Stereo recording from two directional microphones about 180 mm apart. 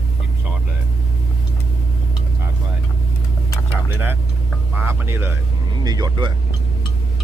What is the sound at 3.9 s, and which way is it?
Vehicle, 10° right (ahead or behind).